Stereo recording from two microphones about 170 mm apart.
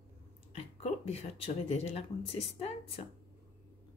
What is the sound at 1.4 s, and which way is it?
Speech, 35° left (ahead or behind).